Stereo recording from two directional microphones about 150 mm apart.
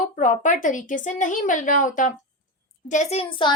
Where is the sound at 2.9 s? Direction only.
50° left (ahead or behind).